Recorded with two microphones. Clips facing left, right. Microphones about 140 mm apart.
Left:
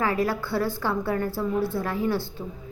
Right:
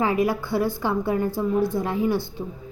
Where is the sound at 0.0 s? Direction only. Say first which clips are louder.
Right 3 dB; 15° right (ahead or behind).